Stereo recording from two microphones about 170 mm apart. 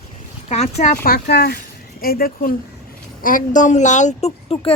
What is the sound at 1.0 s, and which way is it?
Speech, 65° left (ahead or behind).